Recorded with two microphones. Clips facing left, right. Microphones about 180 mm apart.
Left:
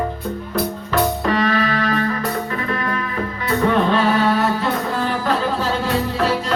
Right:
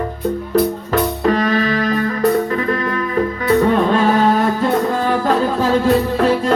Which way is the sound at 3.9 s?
45° right (ahead or behind).